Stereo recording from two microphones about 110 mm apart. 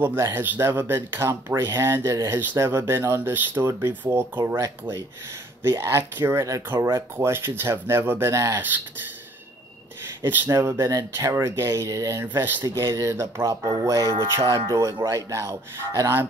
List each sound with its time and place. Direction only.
0.0 s speech: 20° right (ahead or behind)
10.2 s speech: 15° right (ahead or behind)
12.3 s speech: 20° right (ahead or behind)
12.6 s speech: 30° right (ahead or behind)